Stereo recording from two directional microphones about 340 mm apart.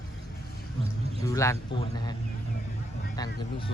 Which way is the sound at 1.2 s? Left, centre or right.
Centre.